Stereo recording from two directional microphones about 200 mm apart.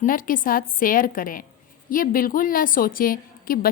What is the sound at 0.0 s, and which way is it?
A woman's voice, 45° left (ahead or behind).